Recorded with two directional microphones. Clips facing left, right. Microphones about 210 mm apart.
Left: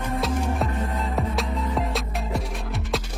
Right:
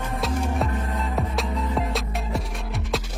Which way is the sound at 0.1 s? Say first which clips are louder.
Left 1 dB; centre (ahead or behind).